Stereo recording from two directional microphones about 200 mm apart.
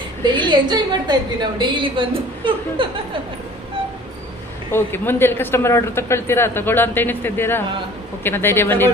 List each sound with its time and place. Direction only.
0.5 s a woman's voice: 20° right (ahead or behind)
4.7 s a man's voice: 10° left (ahead or behind)